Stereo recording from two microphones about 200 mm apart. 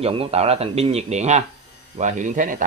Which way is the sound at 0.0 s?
30° right (ahead or behind).